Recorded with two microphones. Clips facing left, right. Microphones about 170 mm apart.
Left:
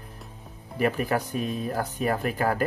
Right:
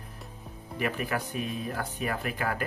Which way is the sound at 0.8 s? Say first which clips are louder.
Left 6 dB; 35° left (ahead or behind).